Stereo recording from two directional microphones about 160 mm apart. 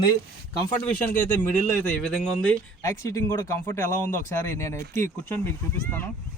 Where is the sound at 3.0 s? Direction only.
20° left (ahead or behind).